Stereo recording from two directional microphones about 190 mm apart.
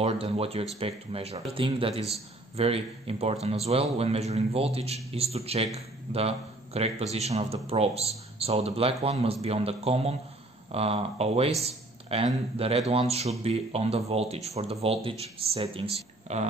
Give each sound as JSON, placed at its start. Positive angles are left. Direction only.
{"t": 0.0, "sound": "a man's voice", "side_deg": -30}